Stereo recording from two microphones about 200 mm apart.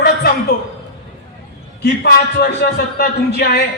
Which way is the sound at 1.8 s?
55° left (ahead or behind).